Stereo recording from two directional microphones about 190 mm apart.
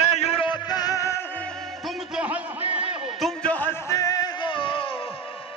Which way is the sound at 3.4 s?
10° left (ahead or behind).